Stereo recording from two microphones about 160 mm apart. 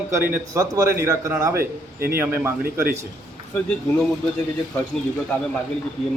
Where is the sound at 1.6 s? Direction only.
65° right (ahead or behind).